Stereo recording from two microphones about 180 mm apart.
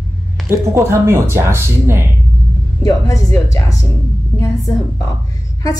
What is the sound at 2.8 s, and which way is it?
Speech, 20° left (ahead or behind).